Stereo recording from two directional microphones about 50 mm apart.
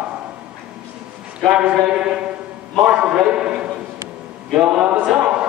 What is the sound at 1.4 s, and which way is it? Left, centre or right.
Speech, centre.